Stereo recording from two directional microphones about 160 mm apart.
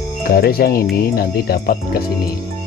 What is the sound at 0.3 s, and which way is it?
Speech, 70° left (ahead or behind).